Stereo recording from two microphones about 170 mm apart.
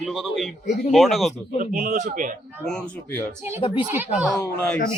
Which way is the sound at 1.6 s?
50° right (ahead or behind).